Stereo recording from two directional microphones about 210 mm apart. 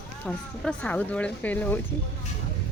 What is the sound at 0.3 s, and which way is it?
Speech, 5° left (ahead or behind).